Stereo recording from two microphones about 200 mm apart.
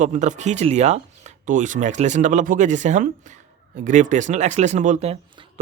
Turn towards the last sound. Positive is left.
turn(degrees=-30)  # may be behind; listen again after turning